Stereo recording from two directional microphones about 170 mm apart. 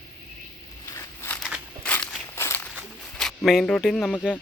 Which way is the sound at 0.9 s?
15° left (ahead or behind).